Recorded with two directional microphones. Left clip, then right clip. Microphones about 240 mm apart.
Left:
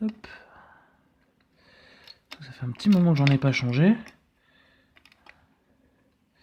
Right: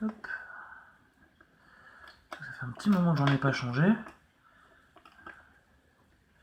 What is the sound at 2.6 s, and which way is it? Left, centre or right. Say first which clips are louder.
Speech: left 6 dB; left.